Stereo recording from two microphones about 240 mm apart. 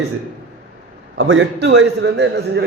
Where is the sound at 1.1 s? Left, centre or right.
Right.